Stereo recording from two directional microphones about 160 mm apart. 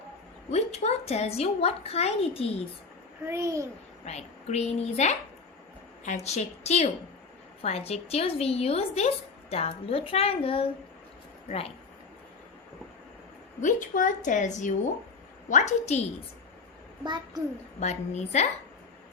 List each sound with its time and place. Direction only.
0.5 s a woman's voice: 40° left (ahead or behind)
3.2 s a child's voice: 20° right (ahead or behind)
4.0 s a woman's voice: 45° left (ahead or behind)
6.2 s a woman's voice: 45° left (ahead or behind)
13.6 s a woman's voice: 55° left (ahead or behind)
17.0 s a child's voice: 25° right (ahead or behind)
17.7 s a woman's voice: 45° left (ahead or behind)